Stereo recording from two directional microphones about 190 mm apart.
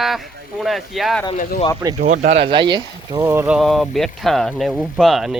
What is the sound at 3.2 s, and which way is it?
Speech, 15° right (ahead or behind).